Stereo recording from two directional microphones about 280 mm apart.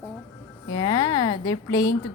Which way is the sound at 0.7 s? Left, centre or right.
Centre.